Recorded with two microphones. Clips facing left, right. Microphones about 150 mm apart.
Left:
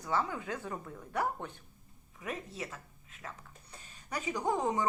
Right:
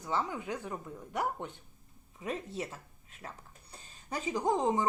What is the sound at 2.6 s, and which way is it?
A woman's voice, 30° right (ahead or behind).